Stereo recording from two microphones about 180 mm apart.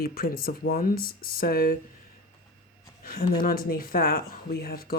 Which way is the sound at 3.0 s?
50° left (ahead or behind).